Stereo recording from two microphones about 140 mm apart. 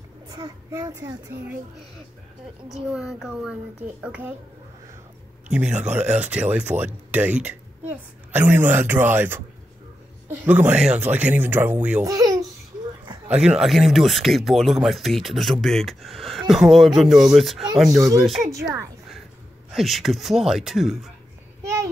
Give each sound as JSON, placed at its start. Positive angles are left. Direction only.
{"t": 0.3, "sound": "a child's voice", "side_deg": -30}
{"t": 2.7, "sound": "speech", "side_deg": -5}
{"t": 5.5, "sound": "a woman's voice", "side_deg": -10}
{"t": 10.4, "sound": "speech", "side_deg": -15}
{"t": 12.0, "sound": "a child's voice", "side_deg": -25}
{"t": 13.3, "sound": "speech", "side_deg": -5}
{"t": 17.9, "sound": "a child's voice", "side_deg": -25}
{"t": 19.7, "sound": "speech", "side_deg": 0}